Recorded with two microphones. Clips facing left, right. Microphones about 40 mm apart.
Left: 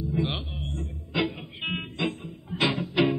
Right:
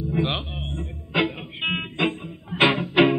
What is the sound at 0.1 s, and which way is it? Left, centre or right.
Music, right.